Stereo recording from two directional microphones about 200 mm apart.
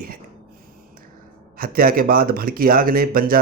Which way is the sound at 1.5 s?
45° right (ahead or behind).